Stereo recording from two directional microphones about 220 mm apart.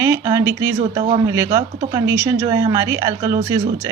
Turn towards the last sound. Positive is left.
turn(degrees=-15)  # may be behind; listen again after turning